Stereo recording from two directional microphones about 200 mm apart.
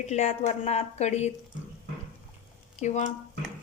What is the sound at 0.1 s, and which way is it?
A woman's voice, 35° left (ahead or behind).